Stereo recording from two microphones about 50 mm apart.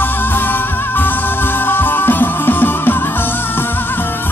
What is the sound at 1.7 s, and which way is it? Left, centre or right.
Music, left.